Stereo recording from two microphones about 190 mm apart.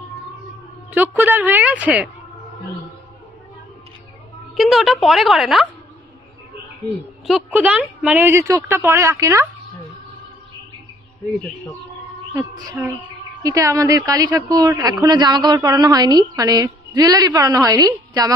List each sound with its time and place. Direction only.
0.9 s speech: 10° right (ahead or behind)
4.6 s a woman's voice: centre (ahead or behind)
7.2 s speech: 5° right (ahead or behind)
12.3 s a woman's voice: 10° right (ahead or behind)